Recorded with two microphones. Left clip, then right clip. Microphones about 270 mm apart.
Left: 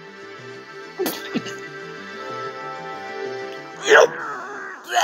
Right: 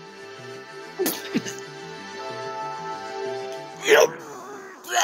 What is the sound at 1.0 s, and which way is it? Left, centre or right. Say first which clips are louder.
Music: left 1 dB; centre.